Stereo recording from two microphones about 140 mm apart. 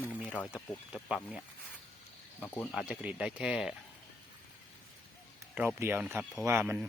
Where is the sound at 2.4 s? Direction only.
15° left (ahead or behind).